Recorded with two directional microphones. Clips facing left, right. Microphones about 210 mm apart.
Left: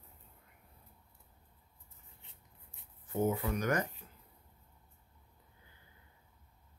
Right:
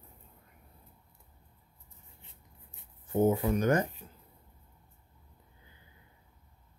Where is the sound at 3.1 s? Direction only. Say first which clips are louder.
Right 6 dB; 30° right (ahead or behind).